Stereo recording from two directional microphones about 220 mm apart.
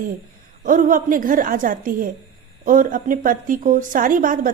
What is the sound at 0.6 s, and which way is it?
A woman's voice, 35° right (ahead or behind).